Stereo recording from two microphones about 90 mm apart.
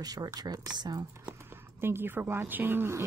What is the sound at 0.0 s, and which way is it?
Speech, 45° right (ahead or behind).